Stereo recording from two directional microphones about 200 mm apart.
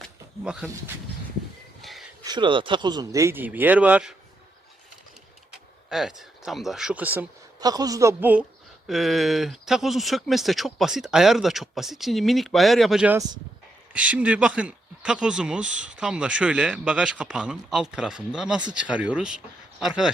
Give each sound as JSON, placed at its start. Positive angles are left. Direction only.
{"t": 1.8, "sound": "a sound", "side_deg": 0}
{"t": 2.2, "sound": "speech", "side_deg": -20}
{"t": 5.9, "sound": "speech", "side_deg": 0}